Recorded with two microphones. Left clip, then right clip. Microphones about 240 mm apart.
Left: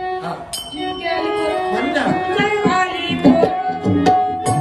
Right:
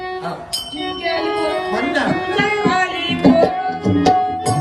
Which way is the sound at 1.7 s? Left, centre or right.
Centre.